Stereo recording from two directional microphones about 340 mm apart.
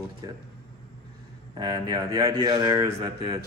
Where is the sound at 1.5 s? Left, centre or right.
Centre.